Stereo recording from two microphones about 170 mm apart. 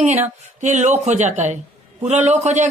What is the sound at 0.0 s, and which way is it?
Speech, 40° right (ahead or behind).